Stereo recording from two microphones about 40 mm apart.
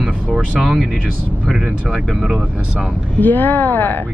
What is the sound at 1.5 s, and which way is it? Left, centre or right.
Speech, right.